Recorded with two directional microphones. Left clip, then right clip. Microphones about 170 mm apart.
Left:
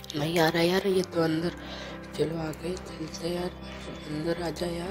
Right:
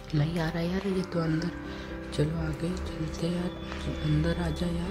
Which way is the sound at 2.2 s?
30° left (ahead or behind).